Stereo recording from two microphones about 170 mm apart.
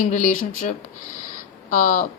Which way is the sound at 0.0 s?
45° left (ahead or behind).